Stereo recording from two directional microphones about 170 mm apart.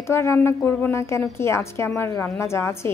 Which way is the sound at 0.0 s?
15° left (ahead or behind).